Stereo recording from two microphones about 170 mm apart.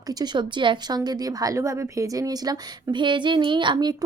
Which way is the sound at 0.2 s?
25° right (ahead or behind).